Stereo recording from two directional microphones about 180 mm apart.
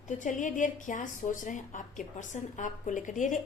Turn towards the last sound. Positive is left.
turn(degrees=45)  # may be behind; listen again after turning